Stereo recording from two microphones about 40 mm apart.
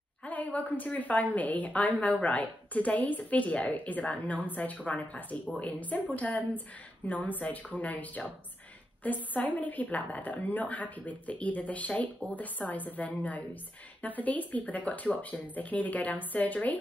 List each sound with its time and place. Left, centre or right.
0.2 s a woman's voice: left